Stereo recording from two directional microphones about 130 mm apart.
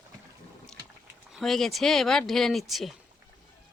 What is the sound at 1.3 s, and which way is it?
Speech, centre (ahead or behind).